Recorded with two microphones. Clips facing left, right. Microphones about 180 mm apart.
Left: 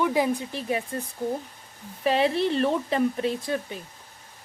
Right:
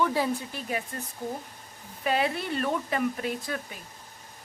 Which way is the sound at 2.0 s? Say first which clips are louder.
Left 5 dB; 30° left (ahead or behind).